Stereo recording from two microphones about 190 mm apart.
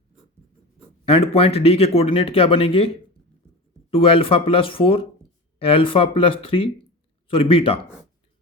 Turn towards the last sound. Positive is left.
turn(degrees=30)  # may be behind; listen again after turning